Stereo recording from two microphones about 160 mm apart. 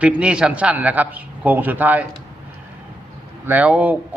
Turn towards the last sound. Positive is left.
turn(degrees=-10)  # may be behind; listen again after turning